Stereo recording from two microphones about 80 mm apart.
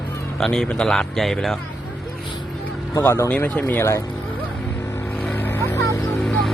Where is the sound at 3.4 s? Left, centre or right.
Left.